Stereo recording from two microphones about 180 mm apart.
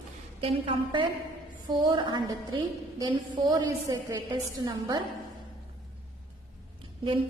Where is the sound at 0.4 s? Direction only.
30° right (ahead or behind).